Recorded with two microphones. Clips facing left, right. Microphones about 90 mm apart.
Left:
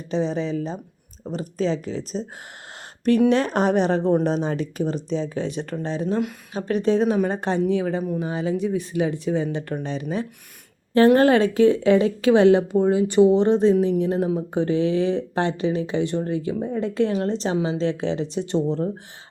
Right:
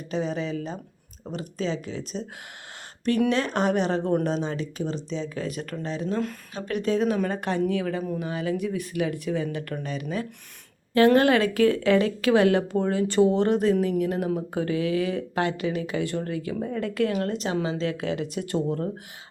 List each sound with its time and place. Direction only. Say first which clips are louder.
0.1 s speech: left 4 dB; 30° left (ahead or behind)
3.3 s speech: left 4 dB; 40° left (ahead or behind)
5.3 s speech: left 4 dB; 25° left (ahead or behind)